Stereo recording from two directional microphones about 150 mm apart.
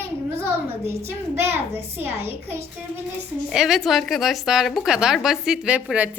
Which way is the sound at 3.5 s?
5° right (ahead or behind).